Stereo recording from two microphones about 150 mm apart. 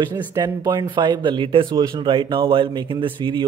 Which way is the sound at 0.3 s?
25° right (ahead or behind).